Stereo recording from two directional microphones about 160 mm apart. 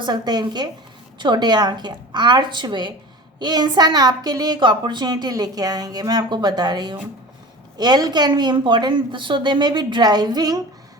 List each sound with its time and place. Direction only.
0.0 s a woman's voice: 25° right (ahead or behind)